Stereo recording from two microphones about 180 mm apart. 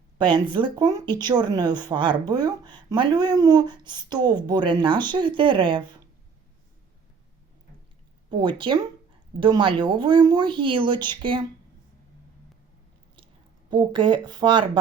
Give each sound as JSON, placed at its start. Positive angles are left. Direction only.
{"t": 0.2, "sound": "speech", "side_deg": -25}
{"t": 8.3, "sound": "speech", "side_deg": -25}
{"t": 13.7, "sound": "speech", "side_deg": -25}